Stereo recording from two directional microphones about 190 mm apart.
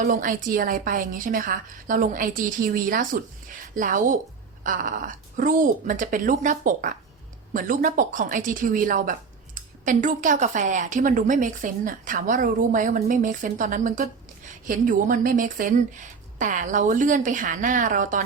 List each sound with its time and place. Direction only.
0.0 s a woman's voice: 45° right (ahead or behind)